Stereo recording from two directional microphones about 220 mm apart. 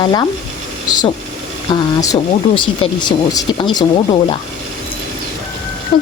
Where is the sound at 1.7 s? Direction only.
15° left (ahead or behind).